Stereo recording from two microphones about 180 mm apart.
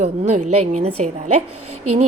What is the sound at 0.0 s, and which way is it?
A woman's voice, 40° right (ahead or behind).